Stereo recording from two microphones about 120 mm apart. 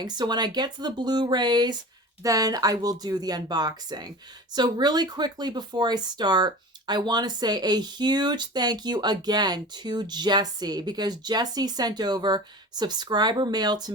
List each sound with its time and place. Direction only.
0.0 s speech: 35° right (ahead or behind)